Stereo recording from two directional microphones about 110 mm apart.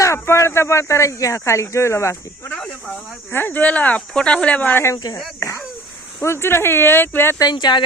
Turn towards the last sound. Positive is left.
turn(degrees=40)  # may be behind; listen again after turning